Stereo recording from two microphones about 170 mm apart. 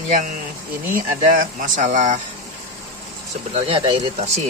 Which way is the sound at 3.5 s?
35° right (ahead or behind).